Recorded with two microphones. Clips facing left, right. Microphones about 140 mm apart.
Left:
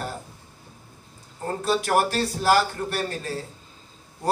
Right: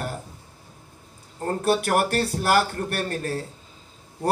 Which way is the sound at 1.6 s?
55° right (ahead or behind).